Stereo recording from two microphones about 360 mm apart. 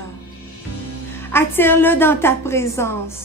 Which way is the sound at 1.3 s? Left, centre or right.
Centre.